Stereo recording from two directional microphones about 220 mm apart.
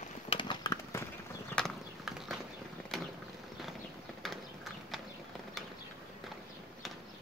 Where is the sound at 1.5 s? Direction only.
Centre (ahead or behind).